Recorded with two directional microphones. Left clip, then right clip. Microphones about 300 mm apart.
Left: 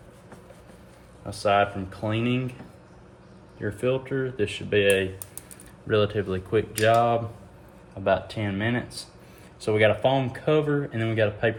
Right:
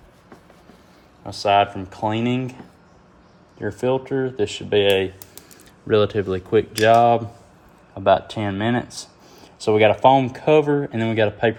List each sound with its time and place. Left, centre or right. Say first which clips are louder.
1.4 s speech: right 5 dB; centre
3.6 s speech: right 5 dB; centre